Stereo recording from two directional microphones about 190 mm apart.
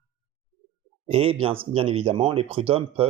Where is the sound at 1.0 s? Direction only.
30° right (ahead or behind).